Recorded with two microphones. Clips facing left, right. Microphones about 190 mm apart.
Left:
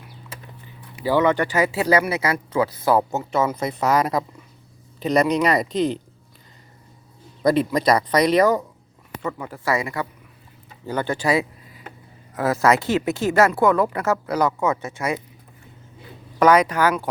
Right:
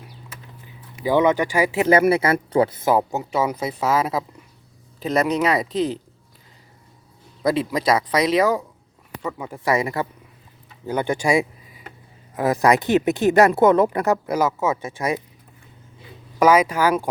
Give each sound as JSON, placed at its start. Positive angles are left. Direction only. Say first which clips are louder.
{"t": 1.0, "sound": "speech", "louder": "right 1 dB", "side_deg": -15}
{"t": 2.0, "sound": "speech", "louder": "right 5 dB", "side_deg": -30}
{"t": 7.4, "sound": "speech", "louder": "left 2 dB", "side_deg": 0}
{"t": 9.5, "sound": "speech", "louder": "right 4 dB", "side_deg": -20}
{"t": 10.8, "sound": "speech", "louder": "right 1 dB", "side_deg": -10}
{"t": 16.4, "sound": "speech", "louder": "even", "side_deg": -10}